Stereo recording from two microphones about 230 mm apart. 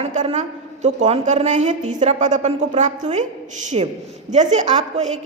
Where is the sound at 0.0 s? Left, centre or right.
Right.